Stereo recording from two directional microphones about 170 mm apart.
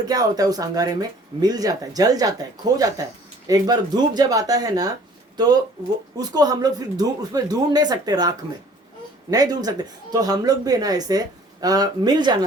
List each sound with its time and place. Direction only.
0.1 s speech: 20° right (ahead or behind)